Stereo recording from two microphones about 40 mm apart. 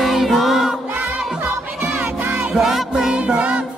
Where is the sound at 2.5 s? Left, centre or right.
Centre.